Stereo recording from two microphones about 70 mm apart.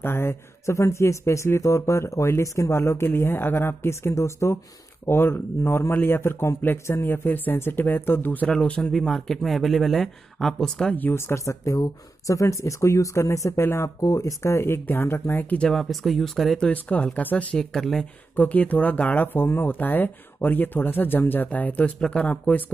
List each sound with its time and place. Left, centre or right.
0.0 s speech: left
2.8 s speech: left
8.5 s speech: centre
11.0 s speech: left
14.0 s speech: left
15.7 s speech: centre
16.6 s speech: left
17.6 s speech: centre
18.3 s speech: left